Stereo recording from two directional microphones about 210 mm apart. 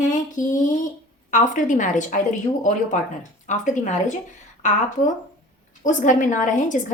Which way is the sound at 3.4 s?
35° left (ahead or behind).